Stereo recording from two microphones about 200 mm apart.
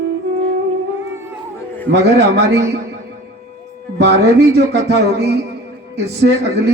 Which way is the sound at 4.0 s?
55° right (ahead or behind).